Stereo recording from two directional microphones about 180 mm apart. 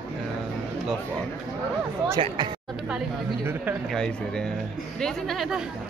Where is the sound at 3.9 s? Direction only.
5° left (ahead or behind).